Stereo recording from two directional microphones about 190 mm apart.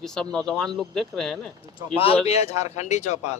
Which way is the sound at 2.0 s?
30° left (ahead or behind).